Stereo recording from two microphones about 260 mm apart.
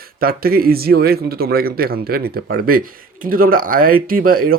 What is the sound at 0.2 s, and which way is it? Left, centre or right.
Speech, right.